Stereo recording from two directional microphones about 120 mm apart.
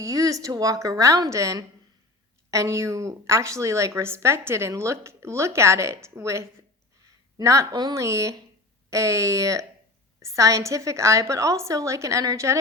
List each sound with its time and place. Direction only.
0.0 s a woman's voice: 30° right (ahead or behind)